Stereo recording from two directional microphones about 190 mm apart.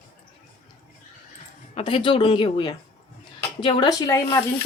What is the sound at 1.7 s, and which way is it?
A woman's voice, 30° left (ahead or behind).